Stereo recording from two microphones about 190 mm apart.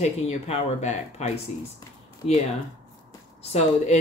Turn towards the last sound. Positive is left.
turn(degrees=35)  # may be behind; listen again after turning